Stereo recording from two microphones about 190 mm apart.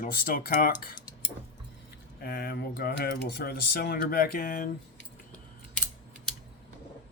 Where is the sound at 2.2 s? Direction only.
55° left (ahead or behind).